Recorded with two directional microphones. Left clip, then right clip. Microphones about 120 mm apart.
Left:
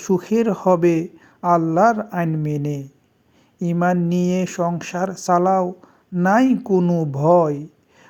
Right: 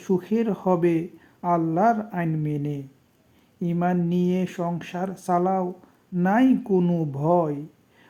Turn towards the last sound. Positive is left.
turn(degrees=40)  # may be behind; listen again after turning